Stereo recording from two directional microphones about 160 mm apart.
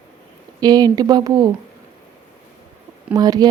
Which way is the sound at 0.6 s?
25° right (ahead or behind).